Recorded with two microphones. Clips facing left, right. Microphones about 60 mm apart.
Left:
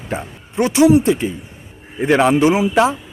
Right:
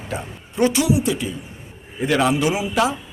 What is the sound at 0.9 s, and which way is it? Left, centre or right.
Speech, left.